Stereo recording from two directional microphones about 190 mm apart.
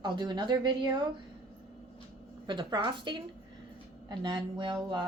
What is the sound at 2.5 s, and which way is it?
Speech, 25° right (ahead or behind).